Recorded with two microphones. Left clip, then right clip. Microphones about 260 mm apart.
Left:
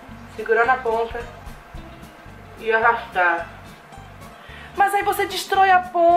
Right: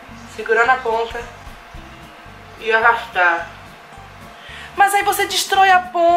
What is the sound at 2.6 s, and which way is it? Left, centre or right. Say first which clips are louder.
Speech: right 3 dB; centre.